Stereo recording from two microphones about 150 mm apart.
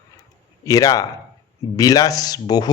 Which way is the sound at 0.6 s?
25° left (ahead or behind).